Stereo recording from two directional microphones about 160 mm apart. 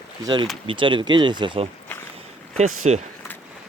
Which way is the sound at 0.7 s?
30° right (ahead or behind).